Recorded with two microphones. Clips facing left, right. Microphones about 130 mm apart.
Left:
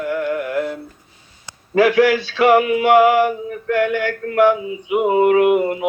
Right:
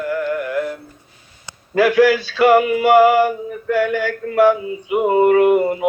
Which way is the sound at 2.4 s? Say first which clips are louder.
Right 1 dB; centre (ahead or behind).